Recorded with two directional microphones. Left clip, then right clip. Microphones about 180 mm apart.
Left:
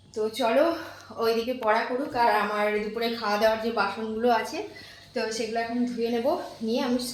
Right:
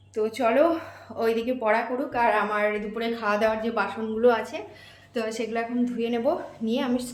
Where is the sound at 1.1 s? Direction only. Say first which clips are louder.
Right 1 dB; 30° right (ahead or behind).